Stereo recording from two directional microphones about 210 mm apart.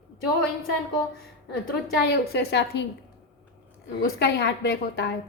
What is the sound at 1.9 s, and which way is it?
Speech, 50° left (ahead or behind).